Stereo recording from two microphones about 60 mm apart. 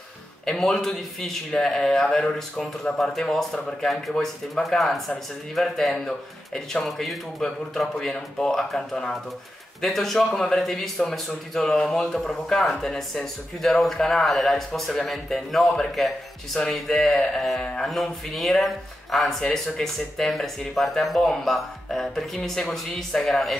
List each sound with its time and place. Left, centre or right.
0.5 s a man's voice: centre